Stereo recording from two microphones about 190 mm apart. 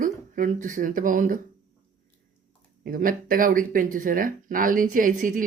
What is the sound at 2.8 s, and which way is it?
Speech, 45° right (ahead or behind).